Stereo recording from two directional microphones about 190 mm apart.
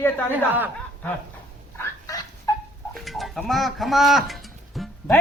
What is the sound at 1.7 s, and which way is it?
Fowl, 15° left (ahead or behind).